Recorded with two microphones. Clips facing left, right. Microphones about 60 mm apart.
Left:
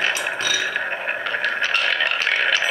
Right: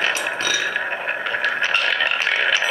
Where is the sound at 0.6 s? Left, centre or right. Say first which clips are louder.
Right 1 dB; centre.